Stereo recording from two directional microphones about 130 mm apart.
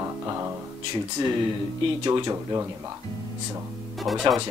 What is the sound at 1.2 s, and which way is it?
Speech, 40° right (ahead or behind).